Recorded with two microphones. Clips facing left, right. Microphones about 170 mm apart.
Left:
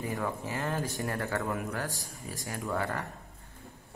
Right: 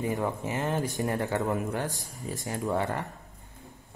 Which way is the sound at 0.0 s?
20° right (ahead or behind).